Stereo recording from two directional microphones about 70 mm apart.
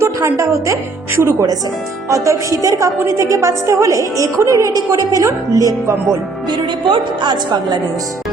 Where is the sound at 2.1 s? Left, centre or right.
Right.